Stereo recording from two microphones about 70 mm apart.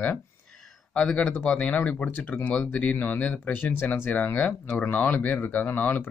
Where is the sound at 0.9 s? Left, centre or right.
Centre.